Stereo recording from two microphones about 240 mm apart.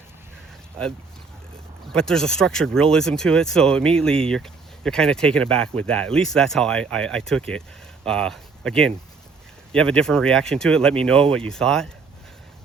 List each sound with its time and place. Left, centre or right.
0.8 s speech: centre